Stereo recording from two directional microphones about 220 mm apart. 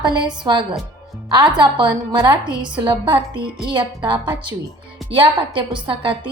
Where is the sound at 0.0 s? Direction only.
20° right (ahead or behind).